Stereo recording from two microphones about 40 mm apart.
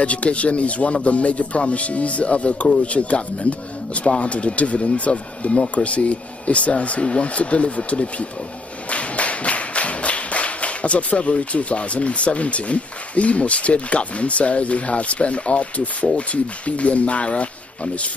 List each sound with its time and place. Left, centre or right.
0.0 s speech: left
8.9 s clapping: left
16.2 s speech: left